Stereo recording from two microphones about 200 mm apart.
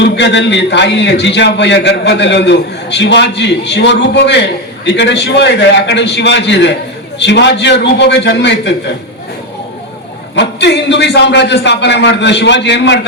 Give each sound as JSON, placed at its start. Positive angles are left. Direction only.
{"t": 0.0, "sound": "a man's voice", "side_deg": 60}
{"t": 10.3, "sound": "a man's voice", "side_deg": 60}